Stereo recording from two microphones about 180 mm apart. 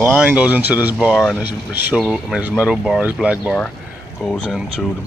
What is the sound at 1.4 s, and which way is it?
Speech, 10° right (ahead or behind).